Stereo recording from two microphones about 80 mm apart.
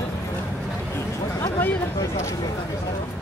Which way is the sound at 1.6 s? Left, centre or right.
Left.